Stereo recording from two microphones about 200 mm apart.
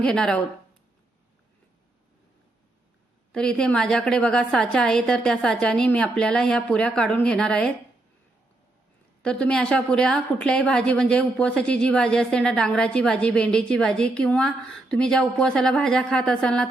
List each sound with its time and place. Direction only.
0.0 s a woman's voice: 5° left (ahead or behind)
3.3 s a woman's voice: 5° left (ahead or behind)
9.2 s a woman's voice: 5° left (ahead or behind)